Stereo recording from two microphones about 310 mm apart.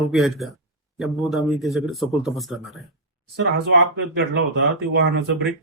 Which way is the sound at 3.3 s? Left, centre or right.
Right.